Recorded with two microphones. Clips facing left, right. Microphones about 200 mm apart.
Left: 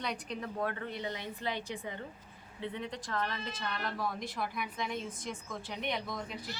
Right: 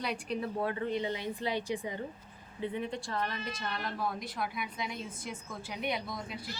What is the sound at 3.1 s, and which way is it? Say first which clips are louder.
Speech: left 3 dB; 15° right (ahead or behind).